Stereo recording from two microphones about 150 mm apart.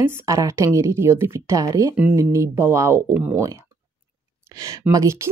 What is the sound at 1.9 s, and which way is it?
Speech, 10° right (ahead or behind).